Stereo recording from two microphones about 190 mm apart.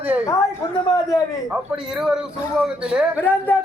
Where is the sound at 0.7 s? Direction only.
25° left (ahead or behind).